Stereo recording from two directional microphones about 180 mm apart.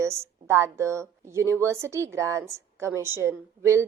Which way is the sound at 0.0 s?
15° right (ahead or behind).